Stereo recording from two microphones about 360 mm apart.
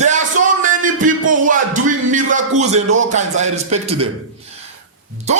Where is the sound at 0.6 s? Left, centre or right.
Right.